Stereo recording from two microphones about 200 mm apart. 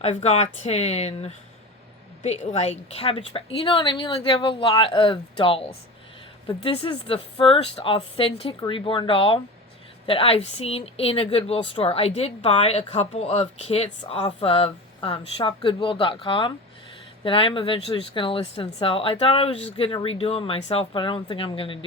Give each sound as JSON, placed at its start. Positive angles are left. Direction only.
{"t": 0.0, "sound": "speech", "side_deg": 30}